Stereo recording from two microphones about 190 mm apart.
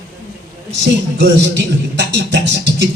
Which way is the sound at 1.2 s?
65° right (ahead or behind).